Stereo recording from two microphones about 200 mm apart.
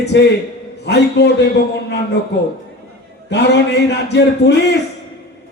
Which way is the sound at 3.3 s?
60° left (ahead or behind).